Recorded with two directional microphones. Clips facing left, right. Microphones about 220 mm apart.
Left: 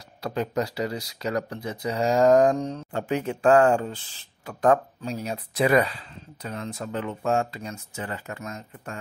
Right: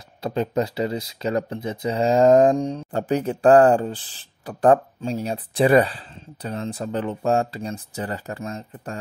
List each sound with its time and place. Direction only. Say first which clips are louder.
0.2 s speech: right 4 dB; 25° right (ahead or behind)
2.9 s speech: right 4 dB; 35° right (ahead or behind)